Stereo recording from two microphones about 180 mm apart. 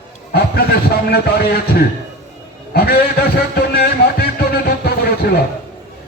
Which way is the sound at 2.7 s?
60° left (ahead or behind).